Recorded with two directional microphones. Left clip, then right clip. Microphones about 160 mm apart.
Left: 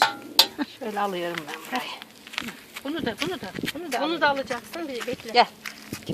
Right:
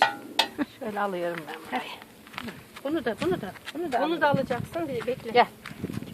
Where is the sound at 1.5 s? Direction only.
25° left (ahead or behind).